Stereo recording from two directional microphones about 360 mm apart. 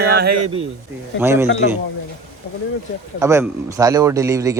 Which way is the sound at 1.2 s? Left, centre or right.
Centre.